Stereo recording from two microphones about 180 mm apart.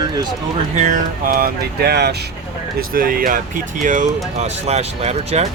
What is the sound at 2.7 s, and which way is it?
Speech, 55° right (ahead or behind).